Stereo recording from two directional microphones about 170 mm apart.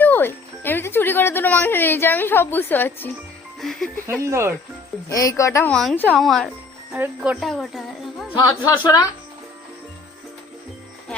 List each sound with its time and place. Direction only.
0.0 s speech: 10° left (ahead or behind)
4.2 s speech: 15° right (ahead or behind)
5.0 s speech: 20° left (ahead or behind)
5.7 s speech: 5° left (ahead or behind)
8.4 s speech: 25° left (ahead or behind)